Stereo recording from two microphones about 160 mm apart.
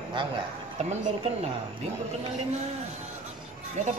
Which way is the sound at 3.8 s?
45° right (ahead or behind).